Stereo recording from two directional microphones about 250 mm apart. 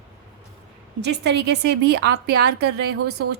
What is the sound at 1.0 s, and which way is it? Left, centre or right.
A woman's voice, right.